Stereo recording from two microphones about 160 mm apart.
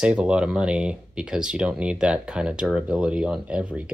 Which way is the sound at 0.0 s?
5° right (ahead or behind).